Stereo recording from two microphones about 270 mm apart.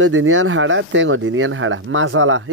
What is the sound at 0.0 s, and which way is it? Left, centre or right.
Speech, right.